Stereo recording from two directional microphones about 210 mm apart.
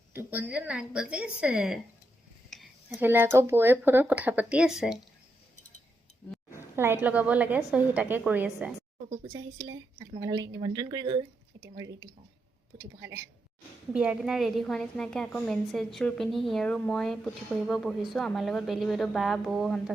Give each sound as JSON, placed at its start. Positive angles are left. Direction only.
{"t": 0.1, "sound": "a woman's voice", "side_deg": -10}
{"t": 2.5, "sound": "a sound", "side_deg": 0}
{"t": 3.1, "sound": "a woman's voice", "side_deg": -10}
{"t": 6.5, "sound": "a woman's voice", "side_deg": -10}
{"t": 9.3, "sound": "a woman's voice", "side_deg": -15}